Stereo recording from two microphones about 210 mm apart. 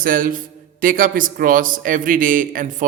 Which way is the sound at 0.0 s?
40° right (ahead or behind).